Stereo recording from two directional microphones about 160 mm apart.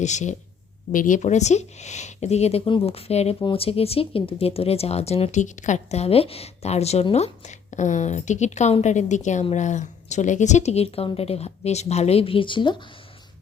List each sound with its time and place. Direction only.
0.0 s speech: 45° left (ahead or behind); by 12.9 s 30° left (ahead or behind)